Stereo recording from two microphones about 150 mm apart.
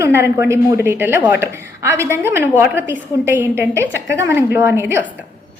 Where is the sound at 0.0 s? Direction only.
15° right (ahead or behind).